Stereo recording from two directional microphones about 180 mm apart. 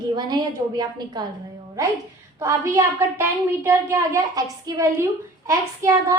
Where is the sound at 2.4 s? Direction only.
15° right (ahead or behind).